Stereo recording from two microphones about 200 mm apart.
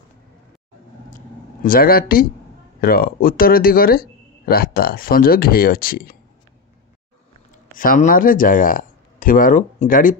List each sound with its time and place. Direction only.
1.1 s a sound: 45° left (ahead or behind)
2.8 s speech: 50° left (ahead or behind)
7.7 s speech: 45° left (ahead or behind)